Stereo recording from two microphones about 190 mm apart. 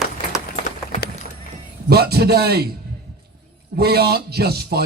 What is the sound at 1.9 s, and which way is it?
Speech, 55° right (ahead or behind).